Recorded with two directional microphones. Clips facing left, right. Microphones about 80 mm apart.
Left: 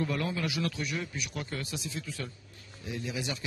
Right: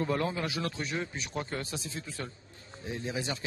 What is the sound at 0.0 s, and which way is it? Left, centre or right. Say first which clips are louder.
A man's voice: right 1 dB; right.